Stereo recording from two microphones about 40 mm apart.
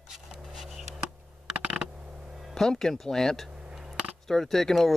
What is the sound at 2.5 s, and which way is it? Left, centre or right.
Speech, centre.